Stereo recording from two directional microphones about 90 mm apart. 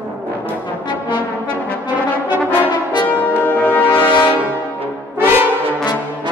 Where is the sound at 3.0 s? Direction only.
20° left (ahead or behind).